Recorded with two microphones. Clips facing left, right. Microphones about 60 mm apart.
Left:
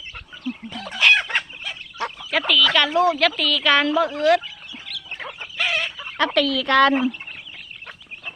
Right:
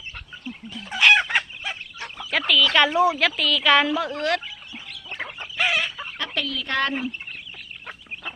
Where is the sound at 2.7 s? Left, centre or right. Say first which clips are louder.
Right 2 dB; centre.